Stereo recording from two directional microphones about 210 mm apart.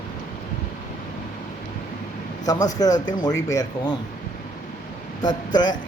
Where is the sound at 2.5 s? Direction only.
15° left (ahead or behind).